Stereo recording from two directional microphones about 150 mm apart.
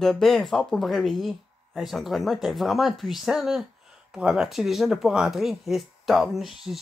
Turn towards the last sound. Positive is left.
turn(degrees=0)  # may be behind; listen again after turning